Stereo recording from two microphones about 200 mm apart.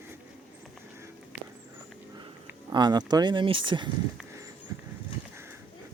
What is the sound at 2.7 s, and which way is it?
Speech, 20° right (ahead or behind).